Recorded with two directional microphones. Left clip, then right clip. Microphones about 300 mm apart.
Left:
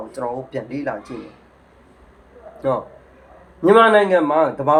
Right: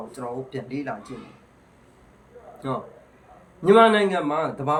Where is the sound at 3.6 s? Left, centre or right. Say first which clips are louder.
Left 4 dB; centre.